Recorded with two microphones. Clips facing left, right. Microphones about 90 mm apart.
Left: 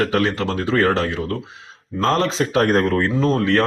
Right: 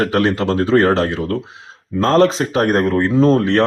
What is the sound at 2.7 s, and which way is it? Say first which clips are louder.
Speech: right 2 dB; 20° right (ahead or behind).